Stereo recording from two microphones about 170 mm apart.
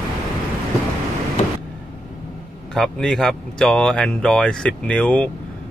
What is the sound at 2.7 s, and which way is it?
Speech, centre (ahead or behind).